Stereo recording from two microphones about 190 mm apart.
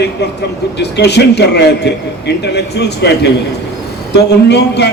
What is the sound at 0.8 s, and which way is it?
A man's voice, 65° left (ahead or behind).